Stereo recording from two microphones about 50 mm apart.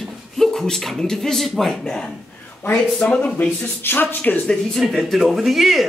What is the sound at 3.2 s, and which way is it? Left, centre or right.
Speech, left.